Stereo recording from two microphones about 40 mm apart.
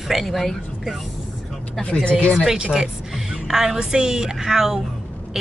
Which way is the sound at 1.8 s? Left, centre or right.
Left.